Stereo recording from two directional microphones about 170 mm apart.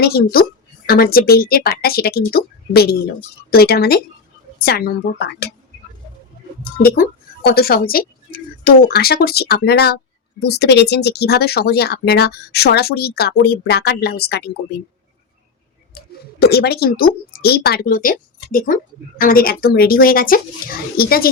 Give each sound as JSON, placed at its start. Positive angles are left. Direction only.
{"t": 0.0, "sound": "speech", "side_deg": 65}
{"t": 6.8, "sound": "speech", "side_deg": 60}
{"t": 16.0, "sound": "speech", "side_deg": 65}